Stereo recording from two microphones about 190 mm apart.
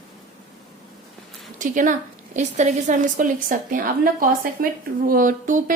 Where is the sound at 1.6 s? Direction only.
40° right (ahead or behind).